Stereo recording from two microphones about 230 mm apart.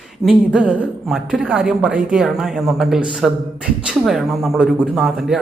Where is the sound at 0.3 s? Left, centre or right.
Centre.